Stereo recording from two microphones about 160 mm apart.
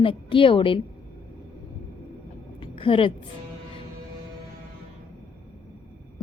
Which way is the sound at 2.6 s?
35° left (ahead or behind).